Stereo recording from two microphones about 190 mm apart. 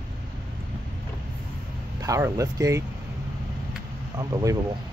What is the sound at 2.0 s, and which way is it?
Speech, 15° right (ahead or behind).